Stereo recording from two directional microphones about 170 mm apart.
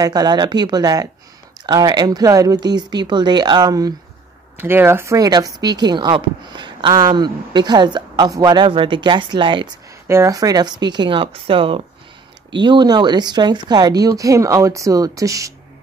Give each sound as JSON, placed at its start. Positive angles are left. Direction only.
{"t": 0.0, "sound": "speech", "side_deg": -25}
{"t": 10.0, "sound": "speech", "side_deg": -15}